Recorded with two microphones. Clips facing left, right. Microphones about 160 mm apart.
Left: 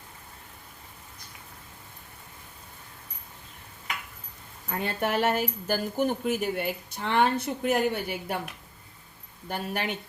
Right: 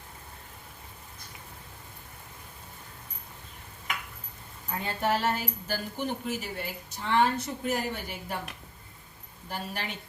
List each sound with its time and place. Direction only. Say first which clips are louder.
4.7 s speech: left 1 dB; 60° left (ahead or behind)
9.5 s speech: left 5 dB; 60° left (ahead or behind)